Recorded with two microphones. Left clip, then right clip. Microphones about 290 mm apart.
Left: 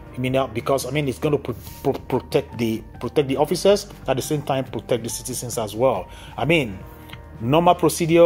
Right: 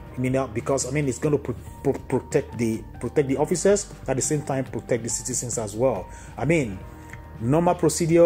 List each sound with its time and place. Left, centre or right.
0.3 s speech: left